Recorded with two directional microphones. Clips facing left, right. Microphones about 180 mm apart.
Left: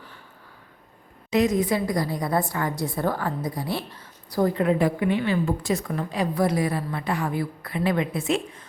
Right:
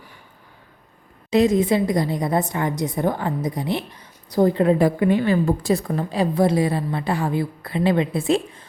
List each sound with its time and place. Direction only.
1.3 s a woman's voice: 30° right (ahead or behind)